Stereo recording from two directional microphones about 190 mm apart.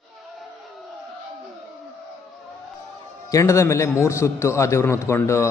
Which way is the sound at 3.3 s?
15° left (ahead or behind).